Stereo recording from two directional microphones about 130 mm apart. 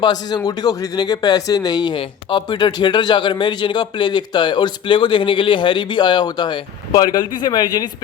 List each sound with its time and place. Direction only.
0.0 s speech: 30° left (ahead or behind)